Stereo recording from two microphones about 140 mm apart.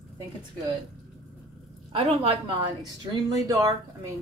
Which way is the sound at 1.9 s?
45° right (ahead or behind).